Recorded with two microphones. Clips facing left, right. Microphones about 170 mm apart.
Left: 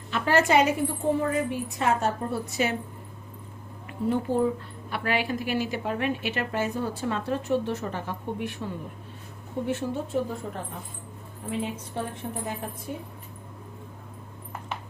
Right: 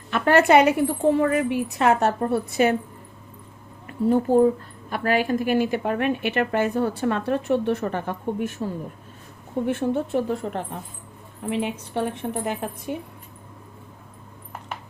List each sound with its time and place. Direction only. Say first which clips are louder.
0.1 s a woman's voice: right 5 dB; 60° right (ahead or behind)
1.2 s a woman's voice: right 5 dB; 75° right (ahead or behind); by 2.7 s 55° right (ahead or behind)
3.8 s a woman's voice: right 6 dB; 40° right (ahead or behind)
9.6 s a woman's voice: right 6 dB; 60° right (ahead or behind)
11.4 s a woman's voice: right 5 dB; 80° right